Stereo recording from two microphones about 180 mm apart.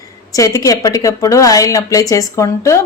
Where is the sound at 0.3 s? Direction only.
20° left (ahead or behind).